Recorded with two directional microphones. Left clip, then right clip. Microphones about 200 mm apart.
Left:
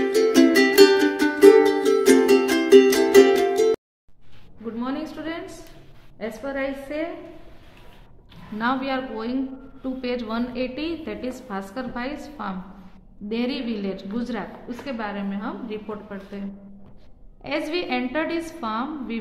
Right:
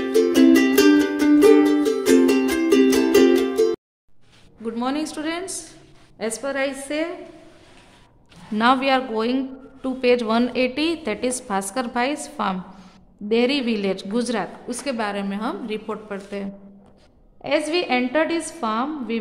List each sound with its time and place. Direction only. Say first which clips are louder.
0.0 s music: right 1 dB; centre (ahead or behind)
4.7 s a sound: right 5 dB; 60° right (ahead or behind)
6.1 s a woman's voice: right 4 dB; 60° right (ahead or behind)
8.5 s a woman's voice: right 7 dB; 45° right (ahead or behind)
17.4 s a woman's voice: right 5 dB; 35° right (ahead or behind)